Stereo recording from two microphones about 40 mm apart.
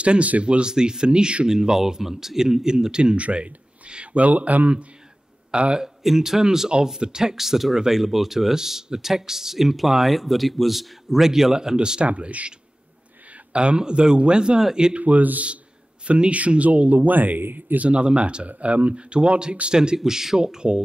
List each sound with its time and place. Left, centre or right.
0.0 s a man's voice: right
0.7 s a man's voice: centre
1.5 s speech: centre
3.2 s speech: right
6.0 s speech: centre
7.3 s speech: centre
12.1 s a man's voice: right; by 15.0 s centre
15.0 s speech: right
17.7 s a man's voice: right